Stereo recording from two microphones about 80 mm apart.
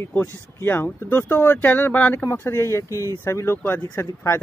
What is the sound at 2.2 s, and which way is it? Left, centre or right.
Speech, left.